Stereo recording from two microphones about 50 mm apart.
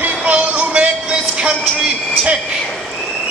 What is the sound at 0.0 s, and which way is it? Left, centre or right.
Music, right.